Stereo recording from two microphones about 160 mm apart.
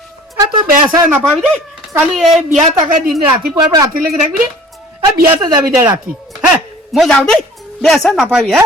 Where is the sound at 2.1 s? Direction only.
Centre (ahead or behind).